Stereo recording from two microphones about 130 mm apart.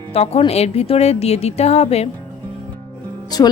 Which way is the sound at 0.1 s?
50° left (ahead or behind).